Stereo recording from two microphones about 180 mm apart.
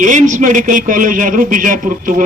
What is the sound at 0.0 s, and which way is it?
A man's voice, 45° right (ahead or behind).